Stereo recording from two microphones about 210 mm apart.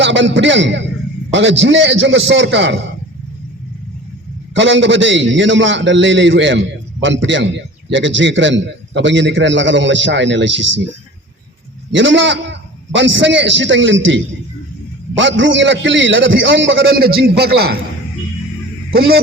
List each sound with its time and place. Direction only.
0.0 s a man's voice: 60° right (ahead or behind)
4.5 s a man's voice: 60° right (ahead or behind)
11.9 s a man's voice: 60° right (ahead or behind)